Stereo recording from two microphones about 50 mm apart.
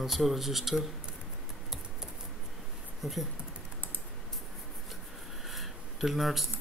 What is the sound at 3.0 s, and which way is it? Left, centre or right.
Speech, centre.